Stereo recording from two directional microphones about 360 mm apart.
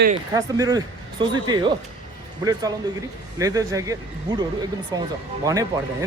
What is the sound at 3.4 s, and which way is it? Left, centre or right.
A man's voice, centre.